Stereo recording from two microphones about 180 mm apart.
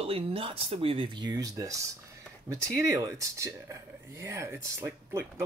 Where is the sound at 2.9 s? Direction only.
20° right (ahead or behind).